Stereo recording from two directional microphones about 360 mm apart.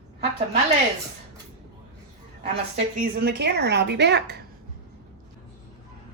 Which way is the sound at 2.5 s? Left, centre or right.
Right.